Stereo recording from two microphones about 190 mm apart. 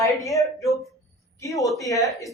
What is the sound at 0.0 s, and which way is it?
Speech, 15° left (ahead or behind).